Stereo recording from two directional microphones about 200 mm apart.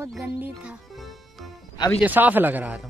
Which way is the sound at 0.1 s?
5° right (ahead or behind).